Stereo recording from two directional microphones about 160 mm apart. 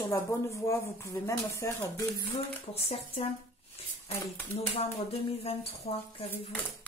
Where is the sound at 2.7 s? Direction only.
40° left (ahead or behind).